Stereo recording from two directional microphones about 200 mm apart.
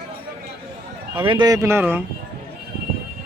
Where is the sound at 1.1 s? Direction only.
25° right (ahead or behind).